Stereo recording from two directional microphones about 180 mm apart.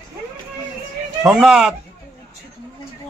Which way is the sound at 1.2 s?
Centre (ahead or behind).